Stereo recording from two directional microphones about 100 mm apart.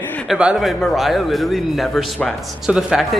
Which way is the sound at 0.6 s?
Centre (ahead or behind).